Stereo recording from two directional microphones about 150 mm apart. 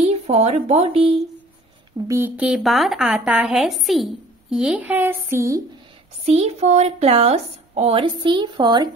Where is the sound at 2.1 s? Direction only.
15° right (ahead or behind).